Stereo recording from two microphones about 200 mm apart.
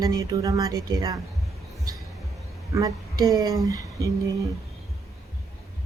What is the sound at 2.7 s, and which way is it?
Speech, 15° right (ahead or behind).